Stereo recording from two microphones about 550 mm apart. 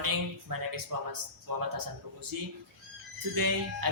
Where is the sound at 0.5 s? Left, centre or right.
Right.